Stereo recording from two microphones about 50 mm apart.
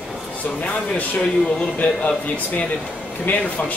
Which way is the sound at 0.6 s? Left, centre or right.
Left.